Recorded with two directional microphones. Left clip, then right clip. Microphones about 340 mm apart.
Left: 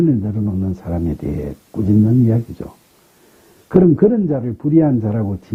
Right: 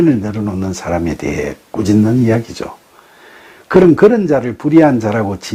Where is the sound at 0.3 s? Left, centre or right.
Centre.